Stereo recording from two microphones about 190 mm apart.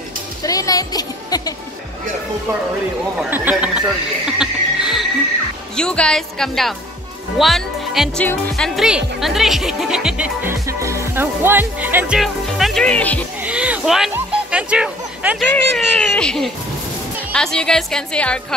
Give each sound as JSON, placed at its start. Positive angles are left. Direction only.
{"t": 0.4, "sound": "music", "side_deg": 20}
{"t": 3.2, "sound": "speech", "side_deg": -10}
{"t": 4.4, "sound": "a sound", "side_deg": -5}
{"t": 5.8, "sound": "speech", "side_deg": 5}
{"t": 13.4, "sound": "music", "side_deg": -5}
{"t": 15.5, "sound": "speech", "side_deg": 5}